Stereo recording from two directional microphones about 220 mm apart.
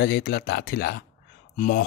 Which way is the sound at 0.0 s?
45° left (ahead or behind).